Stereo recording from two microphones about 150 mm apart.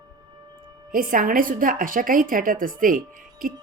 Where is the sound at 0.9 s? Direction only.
65° right (ahead or behind).